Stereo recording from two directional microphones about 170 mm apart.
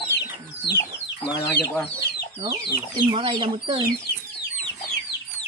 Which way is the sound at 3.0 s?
30° right (ahead or behind).